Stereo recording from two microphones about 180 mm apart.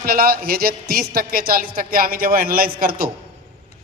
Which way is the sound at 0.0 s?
55° right (ahead or behind).